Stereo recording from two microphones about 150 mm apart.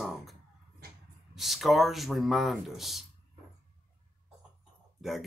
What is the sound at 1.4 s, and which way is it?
Speech, centre (ahead or behind).